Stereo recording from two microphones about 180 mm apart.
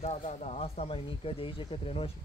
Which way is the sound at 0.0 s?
35° left (ahead or behind).